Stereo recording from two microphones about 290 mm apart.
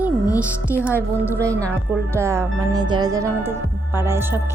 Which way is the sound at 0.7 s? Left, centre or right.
Centre.